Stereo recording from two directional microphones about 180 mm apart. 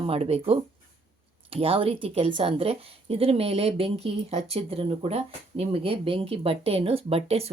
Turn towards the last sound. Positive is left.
turn(degrees=-35)  # may be behind; listen again after turning